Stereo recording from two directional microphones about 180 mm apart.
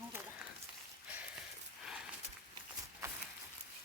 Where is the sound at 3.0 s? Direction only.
15° right (ahead or behind).